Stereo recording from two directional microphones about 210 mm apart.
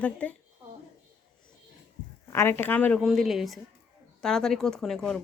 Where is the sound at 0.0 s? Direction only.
5° left (ahead or behind).